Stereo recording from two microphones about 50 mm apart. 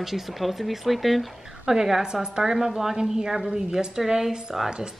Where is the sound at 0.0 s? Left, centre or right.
Centre.